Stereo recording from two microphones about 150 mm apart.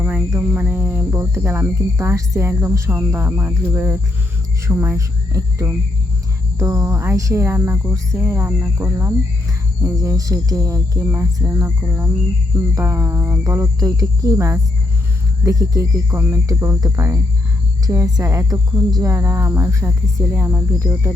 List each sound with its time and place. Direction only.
0.3 s speech: 10° right (ahead or behind)